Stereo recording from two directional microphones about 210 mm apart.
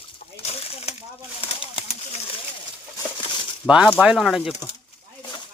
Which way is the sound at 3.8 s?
Centre (ahead or behind).